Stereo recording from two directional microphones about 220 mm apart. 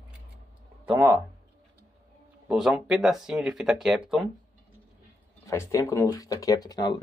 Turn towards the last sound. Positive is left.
turn(degrees=20)  # may be behind; listen again after turning